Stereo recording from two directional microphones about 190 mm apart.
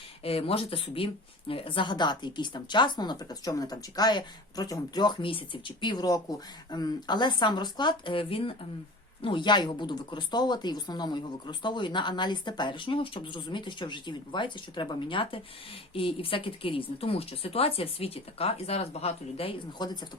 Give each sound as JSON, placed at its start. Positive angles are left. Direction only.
{"t": 0.2, "sound": "speech", "side_deg": 30}